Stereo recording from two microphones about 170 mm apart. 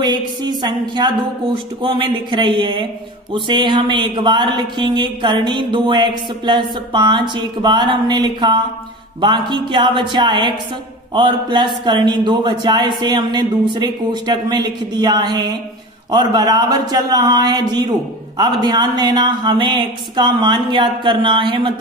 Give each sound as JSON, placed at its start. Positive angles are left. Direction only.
{"t": 0.0, "sound": "speech", "side_deg": -25}